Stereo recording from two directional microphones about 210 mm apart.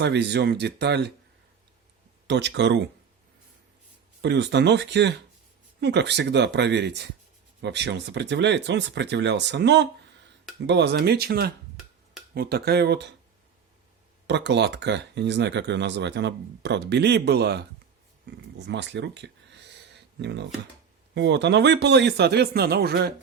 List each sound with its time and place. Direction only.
0.0 s speech: 55° right (ahead or behind)
2.2 s speech: 55° right (ahead or behind)
4.2 s speech: 55° right (ahead or behind)
14.3 s speech: 55° right (ahead or behind)
18.3 s a sound: 55° right (ahead or behind)
21.2 s speech: 55° right (ahead or behind)